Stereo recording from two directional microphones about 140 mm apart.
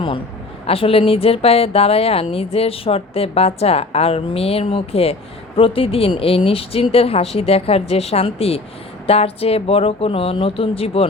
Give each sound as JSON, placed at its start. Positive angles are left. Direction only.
{"t": 0.7, "sound": "speech", "side_deg": 40}